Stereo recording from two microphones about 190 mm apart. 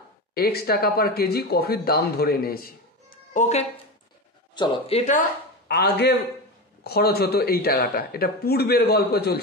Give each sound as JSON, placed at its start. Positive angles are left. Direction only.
{"t": 0.3, "sound": "speech", "side_deg": 55}
{"t": 5.7, "sound": "speech", "side_deg": 55}